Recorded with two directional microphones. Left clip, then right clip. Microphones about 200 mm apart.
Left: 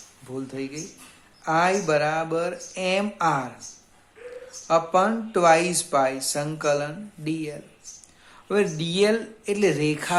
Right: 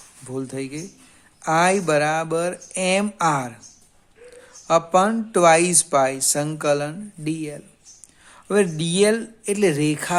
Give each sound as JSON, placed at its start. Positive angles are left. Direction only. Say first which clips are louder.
{"t": 0.3, "sound": "speech", "louder": "right 3 dB", "side_deg": -50}
{"t": 4.7, "sound": "speech", "louder": "right 3 dB", "side_deg": -45}